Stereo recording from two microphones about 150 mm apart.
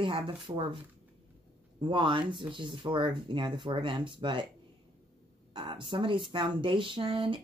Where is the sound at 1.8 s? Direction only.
35° right (ahead or behind).